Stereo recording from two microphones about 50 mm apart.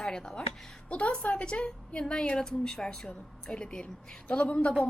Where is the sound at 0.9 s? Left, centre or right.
Left.